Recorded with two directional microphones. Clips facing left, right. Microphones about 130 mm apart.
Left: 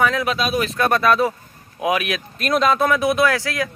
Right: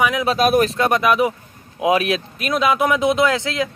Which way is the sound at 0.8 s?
15° right (ahead or behind).